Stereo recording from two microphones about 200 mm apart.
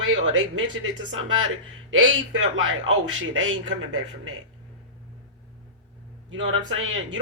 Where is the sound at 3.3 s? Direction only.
75° right (ahead or behind).